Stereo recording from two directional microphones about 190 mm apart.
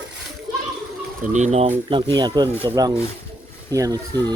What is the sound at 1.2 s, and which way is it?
Speech, 40° right (ahead or behind).